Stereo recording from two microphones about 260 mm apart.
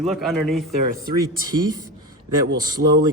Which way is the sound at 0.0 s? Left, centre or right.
Centre.